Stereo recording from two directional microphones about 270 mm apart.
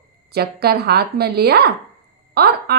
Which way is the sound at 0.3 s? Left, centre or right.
Right.